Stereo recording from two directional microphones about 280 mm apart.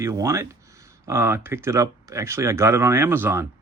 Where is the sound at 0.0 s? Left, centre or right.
Centre.